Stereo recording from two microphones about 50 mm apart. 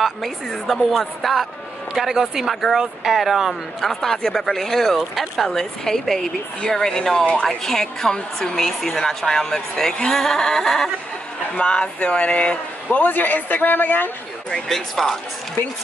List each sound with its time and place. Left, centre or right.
0.0 s a woman's voice: centre
3.9 s a woman's voice: centre
5.5 s a woman's voice: centre
11.5 s speech: left
13.0 s a man's voice: left
14.5 s a woman's voice: centre